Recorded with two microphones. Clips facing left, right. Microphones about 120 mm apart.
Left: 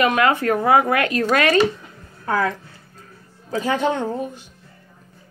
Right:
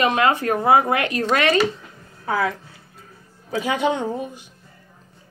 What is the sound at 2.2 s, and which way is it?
A woman's voice, 10° right (ahead or behind).